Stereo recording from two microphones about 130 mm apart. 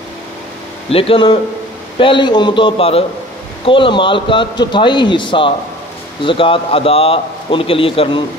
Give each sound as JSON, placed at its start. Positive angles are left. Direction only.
{"t": 0.8, "sound": "speech", "side_deg": 45}